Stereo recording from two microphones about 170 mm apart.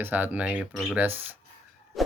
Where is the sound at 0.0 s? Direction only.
10° right (ahead or behind).